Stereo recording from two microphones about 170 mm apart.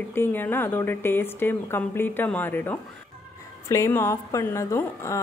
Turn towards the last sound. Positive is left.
turn(degrees=15)  # may be behind; listen again after turning